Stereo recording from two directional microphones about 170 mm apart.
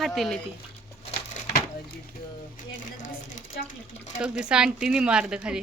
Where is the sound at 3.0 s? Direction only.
45° left (ahead or behind).